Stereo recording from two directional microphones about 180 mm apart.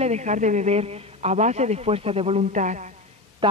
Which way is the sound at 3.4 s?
25° right (ahead or behind).